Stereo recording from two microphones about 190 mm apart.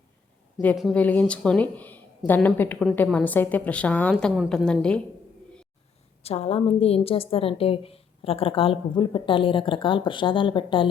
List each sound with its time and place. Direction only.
0.6 s speech: 5° left (ahead or behind)
6.2 s a woman's voice: 35° left (ahead or behind)